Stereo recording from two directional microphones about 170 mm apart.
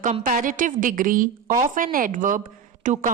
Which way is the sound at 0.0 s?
50° right (ahead or behind).